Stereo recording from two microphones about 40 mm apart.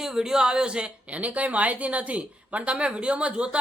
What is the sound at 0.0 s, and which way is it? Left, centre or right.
Speech, centre.